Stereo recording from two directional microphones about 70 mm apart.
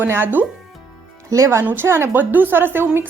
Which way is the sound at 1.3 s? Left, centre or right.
Right.